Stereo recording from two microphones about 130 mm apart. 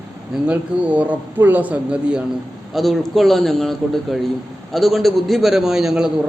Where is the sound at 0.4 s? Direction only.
10° right (ahead or behind).